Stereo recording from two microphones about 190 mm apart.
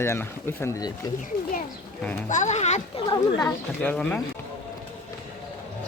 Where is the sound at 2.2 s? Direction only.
40° left (ahead or behind).